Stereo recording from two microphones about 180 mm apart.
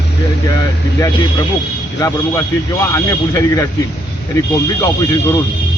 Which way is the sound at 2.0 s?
20° left (ahead or behind).